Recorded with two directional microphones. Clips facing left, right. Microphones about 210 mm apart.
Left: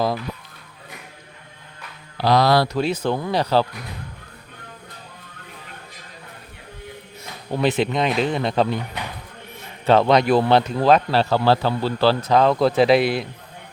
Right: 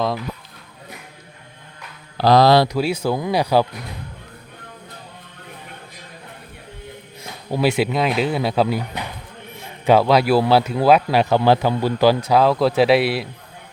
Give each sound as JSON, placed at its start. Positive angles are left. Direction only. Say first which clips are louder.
{"t": 2.1, "sound": "speech", "louder": "right 4 dB", "side_deg": -40}
{"t": 2.5, "sound": "speech", "louder": "right 3 dB", "side_deg": -20}
{"t": 2.7, "sound": "speech", "louder": "right 1 dB", "side_deg": -10}
{"t": 7.5, "sound": "speech", "louder": "right 1 dB", "side_deg": -10}
{"t": 9.8, "sound": "speech", "louder": "right 1 dB", "side_deg": -10}